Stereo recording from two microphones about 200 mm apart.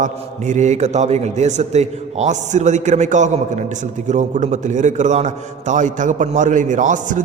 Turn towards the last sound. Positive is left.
turn(degrees=-40)  # may be behind; listen again after turning